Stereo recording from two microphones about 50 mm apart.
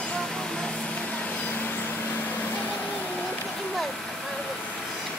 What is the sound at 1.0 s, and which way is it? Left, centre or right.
Vehicle, left.